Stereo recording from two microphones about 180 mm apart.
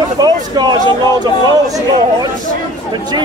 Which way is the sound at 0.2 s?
25° right (ahead or behind).